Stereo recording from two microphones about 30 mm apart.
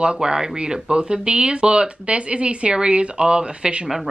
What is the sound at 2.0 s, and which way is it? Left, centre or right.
Speech, right.